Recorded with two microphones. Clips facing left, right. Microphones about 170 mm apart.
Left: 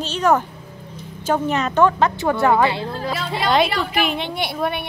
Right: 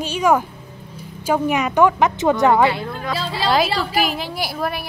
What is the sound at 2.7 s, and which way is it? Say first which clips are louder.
Speech: even; 30° left (ahead or behind).